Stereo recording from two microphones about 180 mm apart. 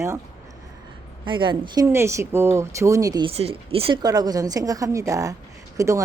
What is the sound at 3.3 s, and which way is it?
Speech, 35° right (ahead or behind).